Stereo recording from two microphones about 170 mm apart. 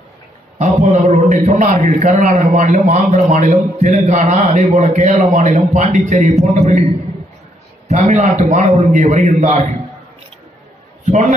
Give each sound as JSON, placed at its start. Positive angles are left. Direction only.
{"t": 0.6, "sound": "a man's voice", "side_deg": -40}
{"t": 7.9, "sound": "a man's voice", "side_deg": -45}
{"t": 11.1, "sound": "a man's voice", "side_deg": -45}